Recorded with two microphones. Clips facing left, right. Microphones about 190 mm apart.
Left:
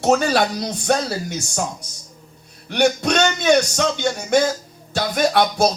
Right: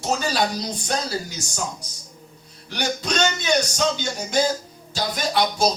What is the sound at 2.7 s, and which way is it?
Speech, 65° left (ahead or behind).